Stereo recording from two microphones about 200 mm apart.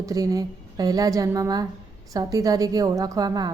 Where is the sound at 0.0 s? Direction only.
15° right (ahead or behind).